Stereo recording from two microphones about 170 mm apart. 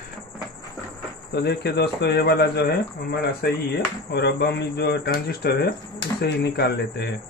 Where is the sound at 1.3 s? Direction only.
75° left (ahead or behind).